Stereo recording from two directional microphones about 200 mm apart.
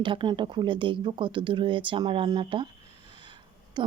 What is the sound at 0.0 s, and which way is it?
Speech, 25° right (ahead or behind).